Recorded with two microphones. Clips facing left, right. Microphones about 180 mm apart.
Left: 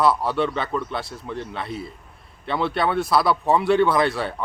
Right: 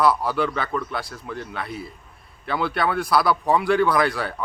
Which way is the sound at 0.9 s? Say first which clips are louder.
Left 1 dB; 25° left (ahead or behind).